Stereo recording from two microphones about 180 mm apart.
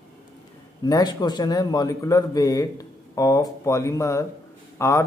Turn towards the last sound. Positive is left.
turn(degrees=15)  # may be behind; listen again after turning